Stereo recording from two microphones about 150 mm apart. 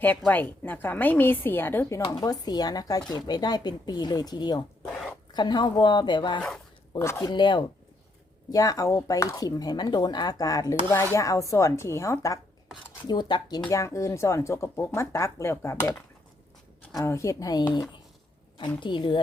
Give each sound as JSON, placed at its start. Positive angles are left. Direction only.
{"t": 0.3, "sound": "a woman's voice", "side_deg": 10}
{"t": 4.9, "sound": "a sound", "side_deg": 0}
{"t": 5.3, "sound": "speech", "side_deg": 30}
{"t": 18.8, "sound": "a woman's voice", "side_deg": 30}